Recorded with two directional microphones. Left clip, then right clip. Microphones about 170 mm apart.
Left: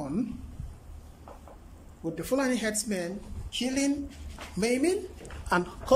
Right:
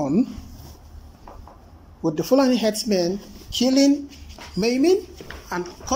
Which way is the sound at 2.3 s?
10° right (ahead or behind).